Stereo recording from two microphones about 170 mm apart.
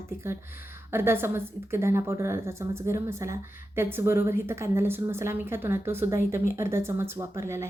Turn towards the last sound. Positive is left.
turn(degrees=-15)  # may be behind; listen again after turning